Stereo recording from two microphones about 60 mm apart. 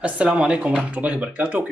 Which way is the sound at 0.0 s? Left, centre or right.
Centre.